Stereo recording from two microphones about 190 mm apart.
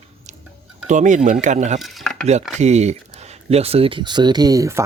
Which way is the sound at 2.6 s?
35° right (ahead or behind).